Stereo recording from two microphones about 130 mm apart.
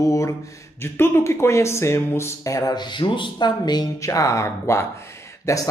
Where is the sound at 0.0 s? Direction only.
25° left (ahead or behind).